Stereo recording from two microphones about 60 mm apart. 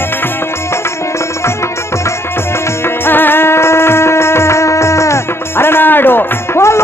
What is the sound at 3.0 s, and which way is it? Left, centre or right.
Music, left.